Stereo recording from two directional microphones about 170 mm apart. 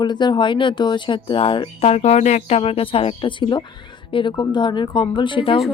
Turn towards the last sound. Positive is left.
turn(degrees=30)  # may be behind; listen again after turning